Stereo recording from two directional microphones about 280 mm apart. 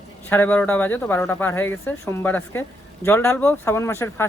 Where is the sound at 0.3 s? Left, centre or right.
Centre.